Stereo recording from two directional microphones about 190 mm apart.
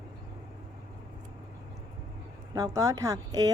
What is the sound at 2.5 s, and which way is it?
Speech, 20° right (ahead or behind).